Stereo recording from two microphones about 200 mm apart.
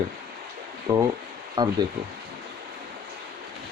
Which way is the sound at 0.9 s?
15° right (ahead or behind).